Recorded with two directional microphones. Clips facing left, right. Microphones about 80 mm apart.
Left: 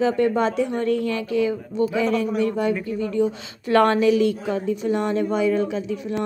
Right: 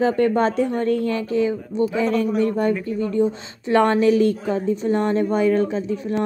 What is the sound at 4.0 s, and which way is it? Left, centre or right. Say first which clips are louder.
A woman's voice: right 2 dB; right.